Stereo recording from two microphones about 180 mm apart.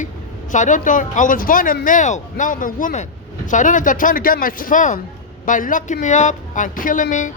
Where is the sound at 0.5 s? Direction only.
45° left (ahead or behind).